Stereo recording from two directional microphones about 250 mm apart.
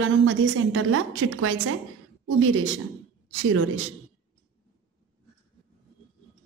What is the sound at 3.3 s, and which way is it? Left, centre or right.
Speech, right.